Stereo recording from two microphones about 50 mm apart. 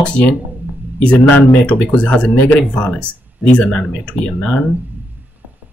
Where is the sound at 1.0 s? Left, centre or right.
Left.